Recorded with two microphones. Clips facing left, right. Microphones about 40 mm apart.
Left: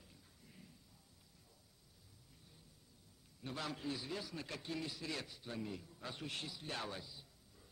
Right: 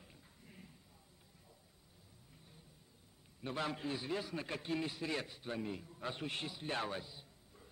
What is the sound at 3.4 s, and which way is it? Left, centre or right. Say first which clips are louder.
A man's voice: right 4 dB; right.